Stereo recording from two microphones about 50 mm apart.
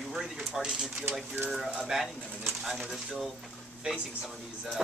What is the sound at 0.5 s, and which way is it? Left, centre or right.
Speech, centre.